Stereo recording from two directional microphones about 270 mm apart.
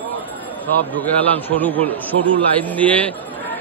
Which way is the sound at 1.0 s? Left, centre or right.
Centre.